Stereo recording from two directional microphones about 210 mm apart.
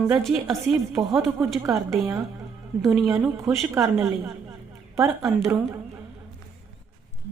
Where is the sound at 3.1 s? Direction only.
15° right (ahead or behind).